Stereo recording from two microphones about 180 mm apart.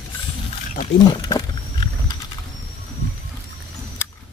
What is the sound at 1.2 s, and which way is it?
Wild animals, 25° left (ahead or behind).